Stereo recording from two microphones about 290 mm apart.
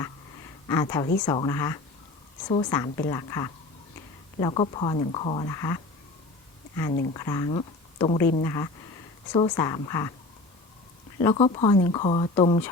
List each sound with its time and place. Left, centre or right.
0.7 s speech: centre
7.1 s speech: centre
11.2 s speech: centre